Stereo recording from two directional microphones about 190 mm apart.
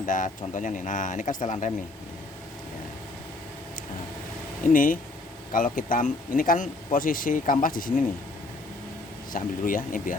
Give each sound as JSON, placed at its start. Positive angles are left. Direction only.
{"t": 0.0, "sound": "speech", "side_deg": 45}
{"t": 4.6, "sound": "speech", "side_deg": 45}
{"t": 9.3, "sound": "speech", "side_deg": 45}